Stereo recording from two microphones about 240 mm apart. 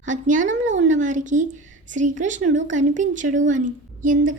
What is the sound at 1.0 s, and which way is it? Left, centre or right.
A woman's voice, right.